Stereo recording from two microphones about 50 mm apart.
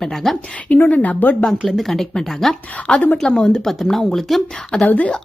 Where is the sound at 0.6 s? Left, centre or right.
Left.